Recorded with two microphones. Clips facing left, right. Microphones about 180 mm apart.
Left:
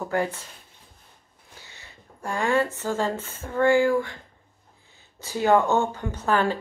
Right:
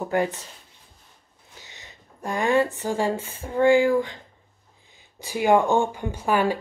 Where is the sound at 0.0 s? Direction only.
15° right (ahead or behind).